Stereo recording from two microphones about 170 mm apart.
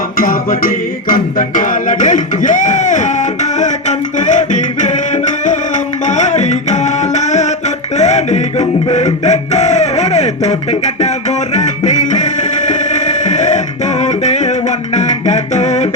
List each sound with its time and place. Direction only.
0.2 s music: 55° left (ahead or behind)